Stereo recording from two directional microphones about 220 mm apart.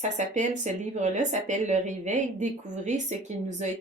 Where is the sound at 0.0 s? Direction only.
35° right (ahead or behind).